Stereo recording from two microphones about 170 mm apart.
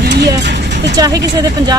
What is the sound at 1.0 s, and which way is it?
Speech, 20° right (ahead or behind).